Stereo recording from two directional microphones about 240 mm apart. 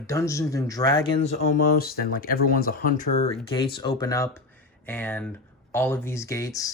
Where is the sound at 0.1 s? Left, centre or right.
Centre.